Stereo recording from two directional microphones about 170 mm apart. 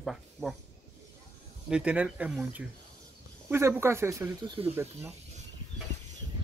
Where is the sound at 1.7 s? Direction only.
5° right (ahead or behind).